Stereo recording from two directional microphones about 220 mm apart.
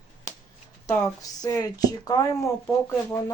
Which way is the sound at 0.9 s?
15° left (ahead or behind).